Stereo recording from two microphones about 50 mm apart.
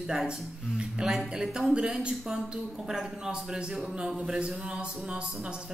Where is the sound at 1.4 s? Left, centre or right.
Centre.